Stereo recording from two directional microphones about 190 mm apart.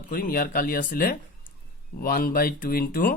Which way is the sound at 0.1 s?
50° left (ahead or behind).